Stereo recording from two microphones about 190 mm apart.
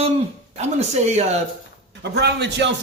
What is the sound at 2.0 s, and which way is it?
Speech, 60° right (ahead or behind).